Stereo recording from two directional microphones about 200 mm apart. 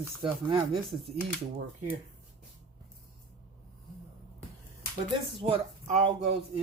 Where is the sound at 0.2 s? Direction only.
25° right (ahead or behind).